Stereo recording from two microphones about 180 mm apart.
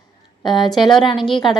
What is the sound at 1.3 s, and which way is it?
Speech, 25° left (ahead or behind).